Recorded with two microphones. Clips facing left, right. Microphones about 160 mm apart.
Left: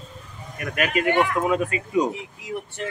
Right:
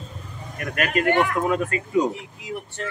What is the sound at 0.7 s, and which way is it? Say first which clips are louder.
Speech: even; 45° right (ahead or behind).